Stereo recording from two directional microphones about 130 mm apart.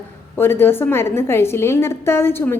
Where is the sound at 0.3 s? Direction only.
20° left (ahead or behind).